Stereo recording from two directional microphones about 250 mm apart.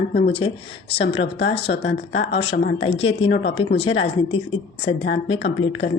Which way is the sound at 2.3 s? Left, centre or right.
Left.